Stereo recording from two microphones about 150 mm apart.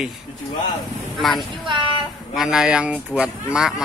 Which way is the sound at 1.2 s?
Centre (ahead or behind).